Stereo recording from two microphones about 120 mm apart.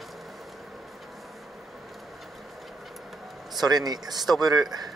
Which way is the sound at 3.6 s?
35° right (ahead or behind).